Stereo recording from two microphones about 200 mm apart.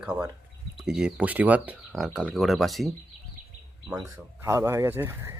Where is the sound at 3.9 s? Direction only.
15° right (ahead or behind).